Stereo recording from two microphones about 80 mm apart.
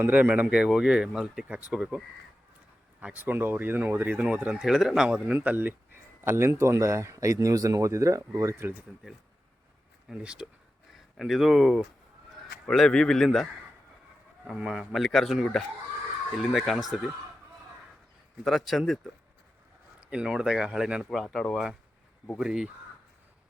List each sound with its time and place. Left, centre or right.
0.0 s speech: right
0.4 s speech: centre
3.0 s speech: centre
4.5 s a man's voice: centre
5.3 s speech: right
6.2 s speech: right
10.1 s a man's voice: centre
18.4 s a man's voice: centre
20.0 s speech: centre
21.1 s a man's voice: centre
22.4 s speech: centre